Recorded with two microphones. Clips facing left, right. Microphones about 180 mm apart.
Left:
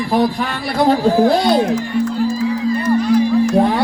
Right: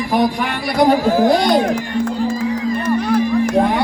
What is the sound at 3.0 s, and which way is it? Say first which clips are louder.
Music: left 2 dB; 60° right (ahead or behind).